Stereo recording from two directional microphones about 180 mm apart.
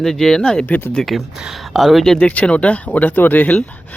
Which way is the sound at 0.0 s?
Centre (ahead or behind).